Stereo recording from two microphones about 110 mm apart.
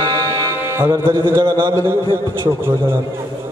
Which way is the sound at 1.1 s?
50° right (ahead or behind).